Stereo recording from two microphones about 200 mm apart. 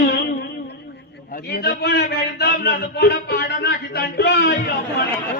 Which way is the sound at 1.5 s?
55° left (ahead or behind).